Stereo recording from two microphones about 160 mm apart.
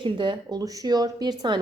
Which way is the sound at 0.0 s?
30° right (ahead or behind).